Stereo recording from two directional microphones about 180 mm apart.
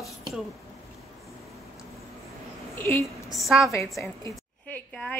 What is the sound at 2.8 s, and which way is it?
Speech, 15° left (ahead or behind).